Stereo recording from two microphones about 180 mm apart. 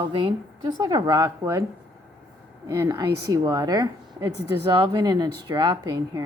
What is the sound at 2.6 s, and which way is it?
Speech, 20° right (ahead or behind).